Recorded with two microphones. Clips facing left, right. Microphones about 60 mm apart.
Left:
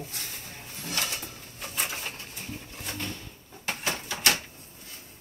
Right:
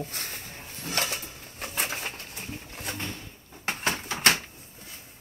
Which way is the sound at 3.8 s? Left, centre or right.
Right.